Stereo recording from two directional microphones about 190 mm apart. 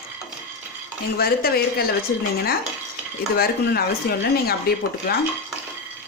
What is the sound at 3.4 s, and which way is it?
Speech, 55° left (ahead or behind).